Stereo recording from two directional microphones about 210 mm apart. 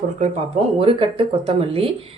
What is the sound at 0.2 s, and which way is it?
Speech, 30° right (ahead or behind).